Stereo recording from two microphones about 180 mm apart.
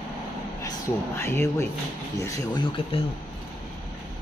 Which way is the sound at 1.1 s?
15° left (ahead or behind).